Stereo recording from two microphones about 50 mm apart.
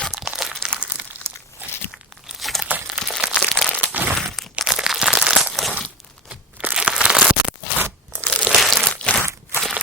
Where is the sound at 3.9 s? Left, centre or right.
Right.